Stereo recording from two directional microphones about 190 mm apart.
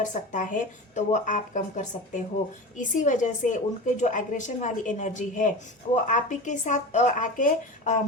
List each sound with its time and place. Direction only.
0.0 s speech: 40° left (ahead or behind)